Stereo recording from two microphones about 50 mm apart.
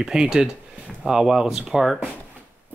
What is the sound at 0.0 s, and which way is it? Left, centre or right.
Speech, centre.